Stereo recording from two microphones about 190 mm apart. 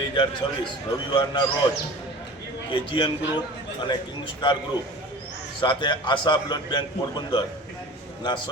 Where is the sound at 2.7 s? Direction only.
25° left (ahead or behind).